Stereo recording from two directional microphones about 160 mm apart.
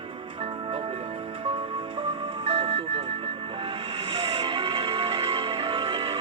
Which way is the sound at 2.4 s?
40° right (ahead or behind).